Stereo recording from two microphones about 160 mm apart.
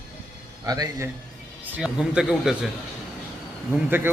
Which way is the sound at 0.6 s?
25° right (ahead or behind).